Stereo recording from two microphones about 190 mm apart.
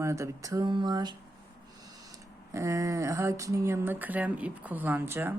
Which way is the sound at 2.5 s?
15° right (ahead or behind).